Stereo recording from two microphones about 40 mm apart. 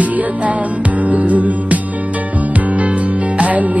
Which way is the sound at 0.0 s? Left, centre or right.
Right.